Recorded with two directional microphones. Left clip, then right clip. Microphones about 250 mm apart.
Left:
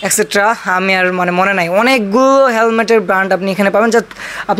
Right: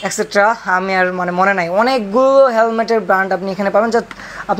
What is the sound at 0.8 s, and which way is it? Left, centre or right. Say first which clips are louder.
Speech: left 3 dB; left.